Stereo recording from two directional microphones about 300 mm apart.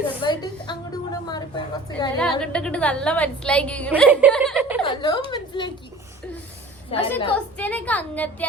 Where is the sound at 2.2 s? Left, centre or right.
Centre.